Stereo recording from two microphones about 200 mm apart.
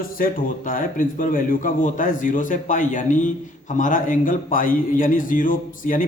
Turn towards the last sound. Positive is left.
turn(degrees=45)  # may be behind; listen again after turning